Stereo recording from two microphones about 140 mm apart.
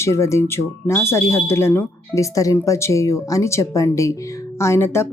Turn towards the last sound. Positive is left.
turn(degrees=20)  # may be behind; listen again after turning